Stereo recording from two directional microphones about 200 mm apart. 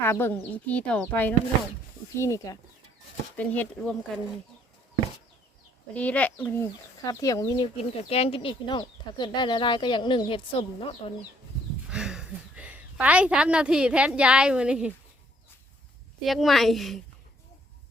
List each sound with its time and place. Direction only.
0.0 s speech: 10° left (ahead or behind)
5.9 s speech: 5° left (ahead or behind); by 11.1 s 25° left (ahead or behind)
11.9 s a woman's voice: 5° right (ahead or behind)
16.2 s a woman's voice: centre (ahead or behind)